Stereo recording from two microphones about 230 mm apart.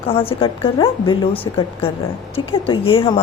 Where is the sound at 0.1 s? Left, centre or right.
Left.